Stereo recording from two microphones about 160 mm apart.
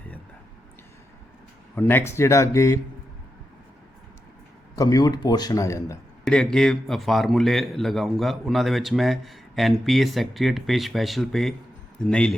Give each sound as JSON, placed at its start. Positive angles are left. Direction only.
{"t": 1.7, "sound": "a man's voice", "side_deg": 10}
{"t": 4.7, "sound": "speech", "side_deg": 20}
{"t": 6.2, "sound": "a man's voice", "side_deg": 5}